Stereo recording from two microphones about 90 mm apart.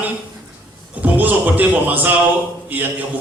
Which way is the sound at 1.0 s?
20° right (ahead or behind).